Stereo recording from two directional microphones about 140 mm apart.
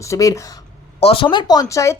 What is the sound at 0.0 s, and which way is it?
Speech, 25° left (ahead or behind).